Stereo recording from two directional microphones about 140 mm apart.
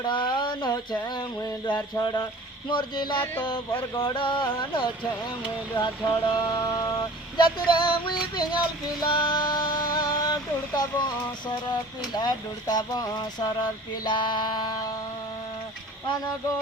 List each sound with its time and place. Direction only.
0.0 s speech: 35° left (ahead or behind)
1.0 s vehicle: 30° left (ahead or behind)